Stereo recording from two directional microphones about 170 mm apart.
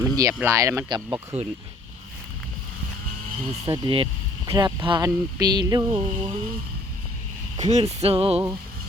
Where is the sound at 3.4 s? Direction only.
35° right (ahead or behind).